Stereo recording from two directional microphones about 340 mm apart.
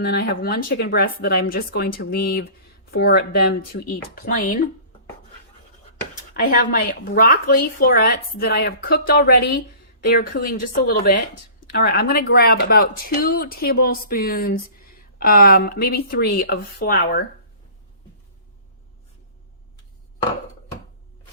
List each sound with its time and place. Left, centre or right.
0.0 s a woman's voice: left
6.5 s a woman's voice: left